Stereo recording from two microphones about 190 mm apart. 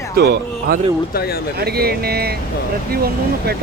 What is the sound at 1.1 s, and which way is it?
Speech, 55° left (ahead or behind).